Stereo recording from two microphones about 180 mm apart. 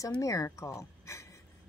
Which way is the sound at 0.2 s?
20° left (ahead or behind).